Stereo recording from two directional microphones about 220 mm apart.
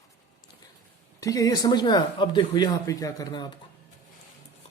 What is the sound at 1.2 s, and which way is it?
Speech, 15° left (ahead or behind).